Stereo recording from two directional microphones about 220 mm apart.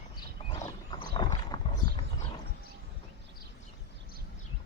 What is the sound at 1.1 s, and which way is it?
Boat, 20° left (ahead or behind).